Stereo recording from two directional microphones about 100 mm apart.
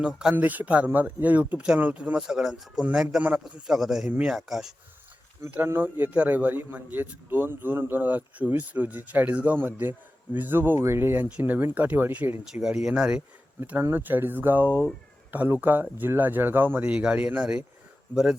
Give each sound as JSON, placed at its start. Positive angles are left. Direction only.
{"t": 0.0, "sound": "a man's voice", "side_deg": -10}
{"t": 5.5, "sound": "a man's voice", "side_deg": -20}
{"t": 13.6, "sound": "a man's voice", "side_deg": -20}